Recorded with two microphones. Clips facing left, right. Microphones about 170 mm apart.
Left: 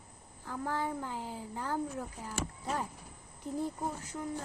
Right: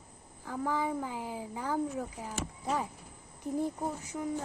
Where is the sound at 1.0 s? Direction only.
15° right (ahead or behind).